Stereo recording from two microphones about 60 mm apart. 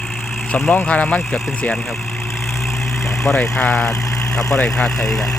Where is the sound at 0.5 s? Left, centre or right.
Left.